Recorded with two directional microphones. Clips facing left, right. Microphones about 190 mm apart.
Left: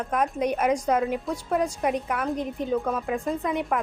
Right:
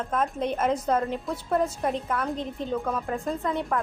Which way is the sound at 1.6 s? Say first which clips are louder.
Left 1 dB; 15° left (ahead or behind).